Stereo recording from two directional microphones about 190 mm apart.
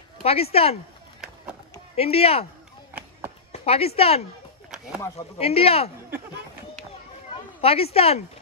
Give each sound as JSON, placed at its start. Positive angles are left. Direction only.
{"t": 0.2, "sound": "speech", "side_deg": 30}
{"t": 2.0, "sound": "speech", "side_deg": 30}
{"t": 2.9, "sound": "run", "side_deg": -10}
{"t": 3.5, "sound": "speech", "side_deg": 30}
{"t": 5.4, "sound": "speech", "side_deg": 30}
{"t": 7.6, "sound": "speech", "side_deg": 30}